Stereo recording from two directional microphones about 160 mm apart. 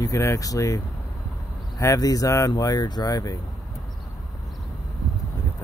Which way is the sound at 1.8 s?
20° left (ahead or behind).